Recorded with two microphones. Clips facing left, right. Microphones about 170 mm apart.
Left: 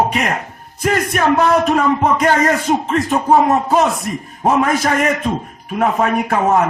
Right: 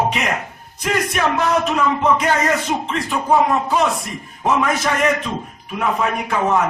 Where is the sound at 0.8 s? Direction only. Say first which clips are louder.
Left 4 dB; 50° left (ahead or behind).